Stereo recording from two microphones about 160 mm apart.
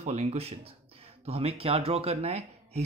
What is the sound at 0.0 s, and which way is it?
Speech, 45° right (ahead or behind).